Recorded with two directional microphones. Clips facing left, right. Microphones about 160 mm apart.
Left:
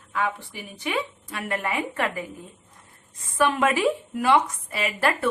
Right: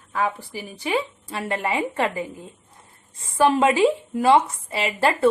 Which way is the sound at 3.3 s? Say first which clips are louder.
Right 4 dB; 30° right (ahead or behind).